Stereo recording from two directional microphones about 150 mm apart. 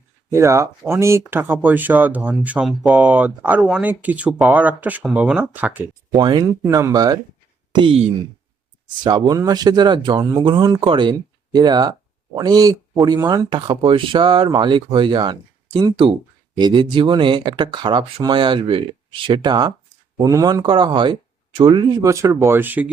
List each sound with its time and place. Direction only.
0.3 s speech: 20° right (ahead or behind)
6.1 s speech: 30° right (ahead or behind)
9.0 s speech: 25° right (ahead or behind)